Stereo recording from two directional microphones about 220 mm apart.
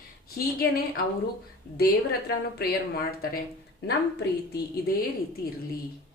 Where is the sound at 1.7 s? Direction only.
45° left (ahead or behind).